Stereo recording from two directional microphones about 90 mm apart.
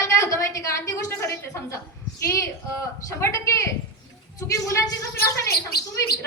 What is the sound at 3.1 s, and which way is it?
A woman's voice, 30° left (ahead or behind).